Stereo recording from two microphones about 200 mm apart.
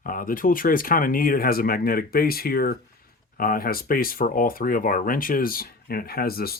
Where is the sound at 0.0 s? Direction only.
45° left (ahead or behind).